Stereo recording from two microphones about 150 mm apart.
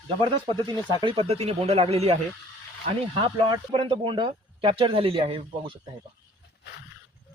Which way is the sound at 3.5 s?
35° right (ahead or behind).